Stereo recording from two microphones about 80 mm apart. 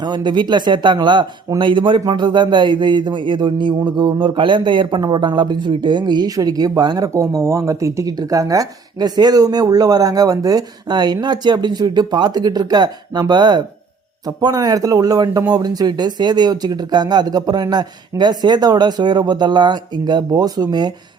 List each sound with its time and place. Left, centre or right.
0.0 s speech: right
1.5 s speech: right
2.0 s speech: right
6.3 s speech: right
7.1 s speech: right